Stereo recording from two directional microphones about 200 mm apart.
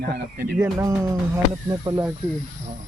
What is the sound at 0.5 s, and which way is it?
Speech, 10° right (ahead or behind).